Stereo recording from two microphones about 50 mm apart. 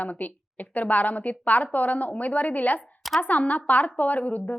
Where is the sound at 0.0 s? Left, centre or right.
Left.